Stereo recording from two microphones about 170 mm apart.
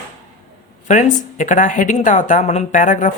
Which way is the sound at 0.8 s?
45° left (ahead or behind).